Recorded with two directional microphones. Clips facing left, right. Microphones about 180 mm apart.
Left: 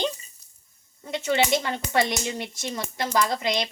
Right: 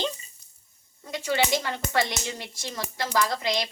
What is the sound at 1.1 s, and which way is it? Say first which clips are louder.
Speech: left 3 dB; 25° left (ahead or behind).